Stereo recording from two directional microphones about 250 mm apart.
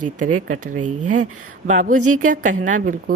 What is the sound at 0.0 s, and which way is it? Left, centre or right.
A woman's voice, right.